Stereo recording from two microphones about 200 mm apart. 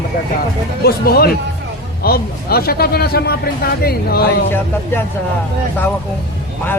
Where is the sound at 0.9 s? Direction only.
50° left (ahead or behind).